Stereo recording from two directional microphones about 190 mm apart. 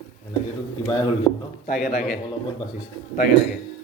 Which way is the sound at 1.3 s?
20° left (ahead or behind).